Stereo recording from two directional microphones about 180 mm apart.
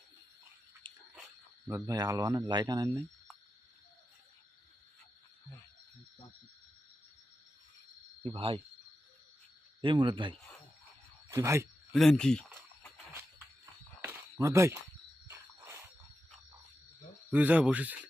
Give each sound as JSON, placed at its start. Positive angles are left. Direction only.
{"t": 1.6, "sound": "speech", "side_deg": -15}
{"t": 8.2, "sound": "speech", "side_deg": -30}
{"t": 9.8, "sound": "speech", "side_deg": -25}
{"t": 11.3, "sound": "speech", "side_deg": -15}
{"t": 11.9, "sound": "speech", "side_deg": 0}
{"t": 14.0, "sound": "a sound", "side_deg": -15}
{"t": 15.3, "sound": "cricket", "side_deg": -15}
{"t": 17.3, "sound": "speech", "side_deg": -10}